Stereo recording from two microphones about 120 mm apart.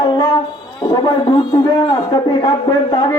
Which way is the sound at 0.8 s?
35° left (ahead or behind).